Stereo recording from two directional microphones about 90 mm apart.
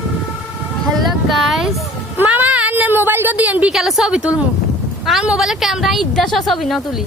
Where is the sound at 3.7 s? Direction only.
5° right (ahead or behind).